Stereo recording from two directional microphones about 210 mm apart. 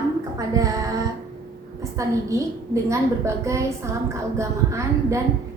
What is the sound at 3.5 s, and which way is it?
A woman's voice, 15° right (ahead or behind).